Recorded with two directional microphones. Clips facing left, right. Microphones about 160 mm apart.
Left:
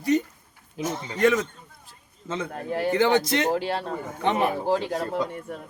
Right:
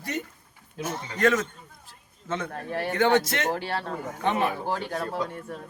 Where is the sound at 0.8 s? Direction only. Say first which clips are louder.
Left 2 dB; 15° left (ahead or behind).